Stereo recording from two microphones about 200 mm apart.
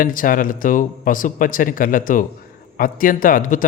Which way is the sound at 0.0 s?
45° left (ahead or behind).